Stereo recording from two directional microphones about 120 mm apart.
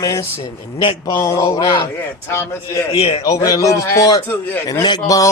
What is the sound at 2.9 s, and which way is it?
Speech, 55° left (ahead or behind).